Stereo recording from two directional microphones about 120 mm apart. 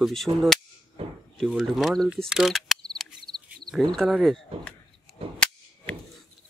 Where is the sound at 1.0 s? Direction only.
50° right (ahead or behind).